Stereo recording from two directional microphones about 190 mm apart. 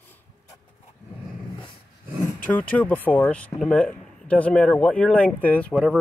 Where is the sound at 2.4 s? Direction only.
10° left (ahead or behind).